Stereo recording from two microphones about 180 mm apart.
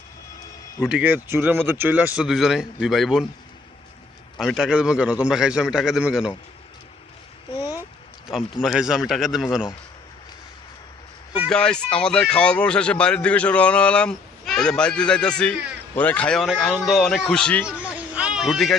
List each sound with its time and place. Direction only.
0.9 s speech: 5° right (ahead or behind)
4.4 s speech: centre (ahead or behind)
7.5 s a sound: 20° left (ahead or behind)
8.3 s speech: centre (ahead or behind)
11.4 s speech: 5° left (ahead or behind)
17.7 s a sound: 10° right (ahead or behind)